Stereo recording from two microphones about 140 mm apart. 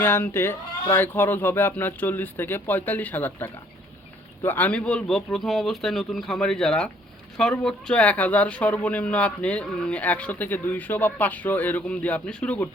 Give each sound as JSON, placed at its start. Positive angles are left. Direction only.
{"t": 0.0, "sound": "speech", "side_deg": 15}